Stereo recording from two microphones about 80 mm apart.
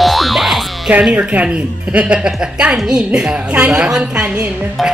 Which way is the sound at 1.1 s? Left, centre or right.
Centre.